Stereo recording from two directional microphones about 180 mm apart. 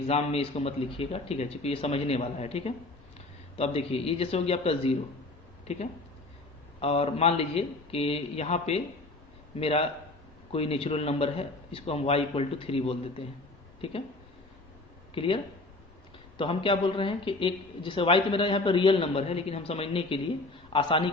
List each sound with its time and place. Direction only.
0.1 s a man's voice: 35° left (ahead or behind)
15.1 s speech: 30° left (ahead or behind)
16.4 s a woman's voice: 30° left (ahead or behind)